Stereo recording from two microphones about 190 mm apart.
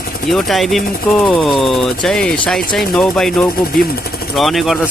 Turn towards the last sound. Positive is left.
turn(degrees=0)  # may be behind; listen again after turning